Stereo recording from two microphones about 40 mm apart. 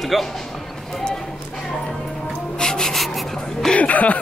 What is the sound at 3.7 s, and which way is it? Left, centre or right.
Speech, left.